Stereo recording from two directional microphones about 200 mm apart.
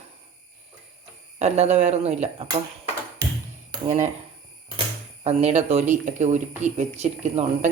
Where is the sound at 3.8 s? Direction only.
35° right (ahead or behind).